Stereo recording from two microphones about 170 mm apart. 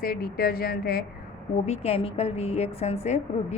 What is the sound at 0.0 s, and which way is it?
A woman's voice, 65° left (ahead or behind).